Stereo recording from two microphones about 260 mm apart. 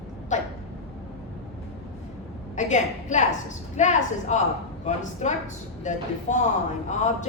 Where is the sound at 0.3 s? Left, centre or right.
Left.